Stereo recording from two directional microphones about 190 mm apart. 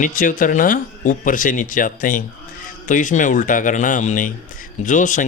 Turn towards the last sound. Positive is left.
turn(degrees=40)  # may be behind; listen again after turning